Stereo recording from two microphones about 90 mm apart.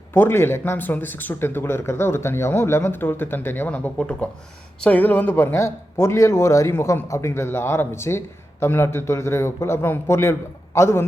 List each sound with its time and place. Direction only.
0.1 s speech: 25° left (ahead or behind)